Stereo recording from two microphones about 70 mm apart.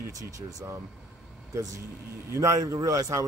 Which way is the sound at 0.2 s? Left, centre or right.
Right.